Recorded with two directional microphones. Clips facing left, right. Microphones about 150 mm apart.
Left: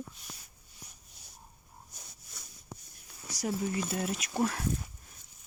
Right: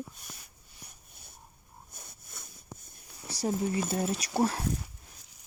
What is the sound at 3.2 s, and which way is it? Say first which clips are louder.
Speech: right 3 dB; 30° right (ahead or behind).